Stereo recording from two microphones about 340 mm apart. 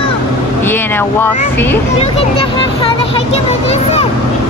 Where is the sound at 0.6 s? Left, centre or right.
Centre.